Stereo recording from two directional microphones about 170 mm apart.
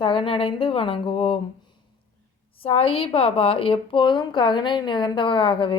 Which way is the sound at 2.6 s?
35° left (ahead or behind).